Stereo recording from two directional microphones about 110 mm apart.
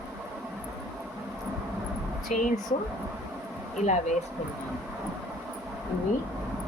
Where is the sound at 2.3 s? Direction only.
90° left.